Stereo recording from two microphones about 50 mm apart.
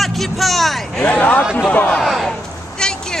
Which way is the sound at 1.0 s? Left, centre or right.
Left.